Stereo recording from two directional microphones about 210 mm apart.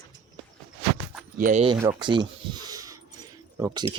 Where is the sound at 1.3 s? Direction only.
40° right (ahead or behind).